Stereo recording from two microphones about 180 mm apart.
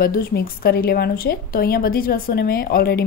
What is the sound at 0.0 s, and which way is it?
A woman's voice, 55° left (ahead or behind).